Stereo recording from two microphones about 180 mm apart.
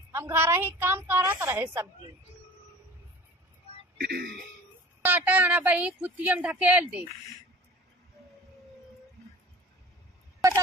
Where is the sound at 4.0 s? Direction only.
55° right (ahead or behind).